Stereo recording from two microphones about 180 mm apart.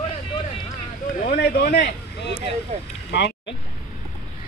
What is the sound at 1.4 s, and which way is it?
Speech, 60° left (ahead or behind).